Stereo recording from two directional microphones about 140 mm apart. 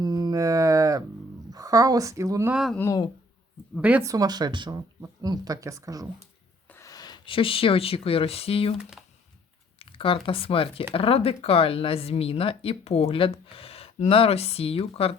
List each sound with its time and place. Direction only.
0.0 s a sound: 30° right (ahead or behind)
1.5 s speech: 25° right (ahead or behind)
2.5 s speech: 5° right (ahead or behind)
2.7 s speech: 20° left (ahead or behind)
3.8 s speech: 10° right (ahead or behind)
4.0 s speech: 25° right (ahead or behind)
6.7 s speech: 20° left (ahead or behind); by 8.7 s 45° left (ahead or behind)
8.8 s speech: 5° right (ahead or behind)
9.7 s speech: 40° left (ahead or behind)